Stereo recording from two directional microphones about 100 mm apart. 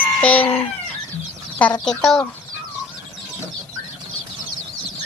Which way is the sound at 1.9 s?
5° left (ahead or behind).